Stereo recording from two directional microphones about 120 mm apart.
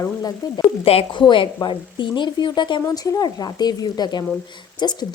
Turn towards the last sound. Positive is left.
turn(degrees=35)  # may be behind; listen again after turning